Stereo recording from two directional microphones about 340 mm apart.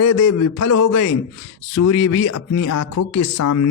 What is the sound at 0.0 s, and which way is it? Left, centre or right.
Speech, left.